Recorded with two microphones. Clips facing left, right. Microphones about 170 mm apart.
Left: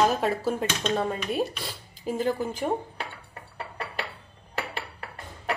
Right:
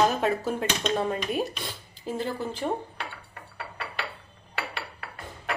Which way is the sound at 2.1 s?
10° left (ahead or behind).